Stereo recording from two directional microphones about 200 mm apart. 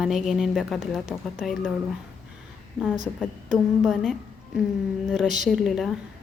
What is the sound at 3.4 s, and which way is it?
Speech, centre (ahead or behind).